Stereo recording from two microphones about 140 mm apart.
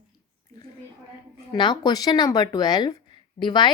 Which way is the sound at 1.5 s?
30° left (ahead or behind).